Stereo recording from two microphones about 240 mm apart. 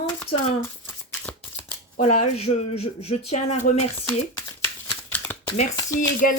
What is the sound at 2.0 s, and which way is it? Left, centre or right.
Speech, left.